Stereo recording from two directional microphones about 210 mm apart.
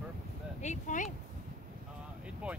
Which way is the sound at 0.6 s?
35° left (ahead or behind).